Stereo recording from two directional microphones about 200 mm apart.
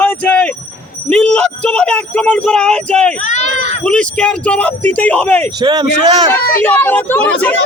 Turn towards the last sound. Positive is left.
turn(degrees=10)  # may be behind; listen again after turning